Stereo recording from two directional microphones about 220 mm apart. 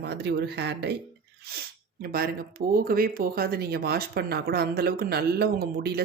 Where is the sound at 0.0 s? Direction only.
50° right (ahead or behind).